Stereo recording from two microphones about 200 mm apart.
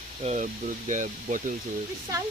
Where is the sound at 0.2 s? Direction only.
35° right (ahead or behind).